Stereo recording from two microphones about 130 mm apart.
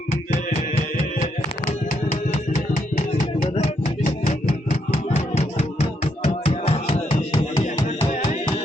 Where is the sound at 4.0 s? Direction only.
75° left (ahead or behind).